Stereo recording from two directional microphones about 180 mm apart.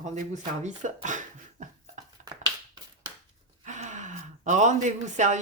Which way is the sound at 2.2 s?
45° right (ahead or behind).